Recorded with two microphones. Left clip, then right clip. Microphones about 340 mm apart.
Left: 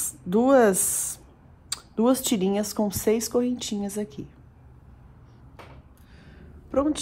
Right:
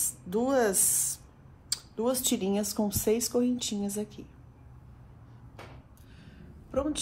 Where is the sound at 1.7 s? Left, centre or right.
Left.